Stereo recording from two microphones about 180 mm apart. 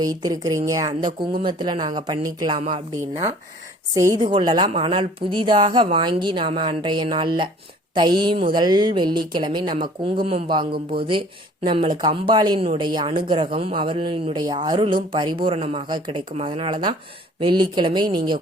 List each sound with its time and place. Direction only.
0.0 s speech: 20° right (ahead or behind)
3.0 s speech: 15° right (ahead or behind)